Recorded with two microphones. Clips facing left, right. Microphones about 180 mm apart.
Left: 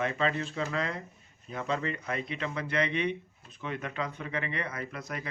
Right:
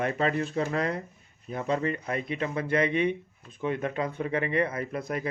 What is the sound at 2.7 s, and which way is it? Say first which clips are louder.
Speech: right 5 dB; 50° right (ahead or behind).